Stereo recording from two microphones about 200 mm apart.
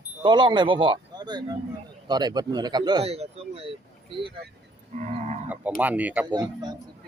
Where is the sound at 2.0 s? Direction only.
20° right (ahead or behind).